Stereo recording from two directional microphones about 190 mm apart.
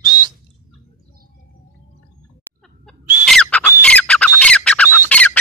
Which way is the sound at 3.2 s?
5° left (ahead or behind).